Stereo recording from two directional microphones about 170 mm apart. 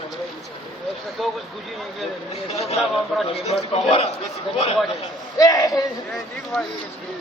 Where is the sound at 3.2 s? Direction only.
35° left (ahead or behind).